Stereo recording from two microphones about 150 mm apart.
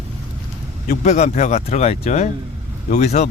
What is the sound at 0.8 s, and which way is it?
Speech, 55° left (ahead or behind).